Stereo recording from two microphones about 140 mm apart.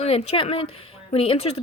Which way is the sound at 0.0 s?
45° left (ahead or behind).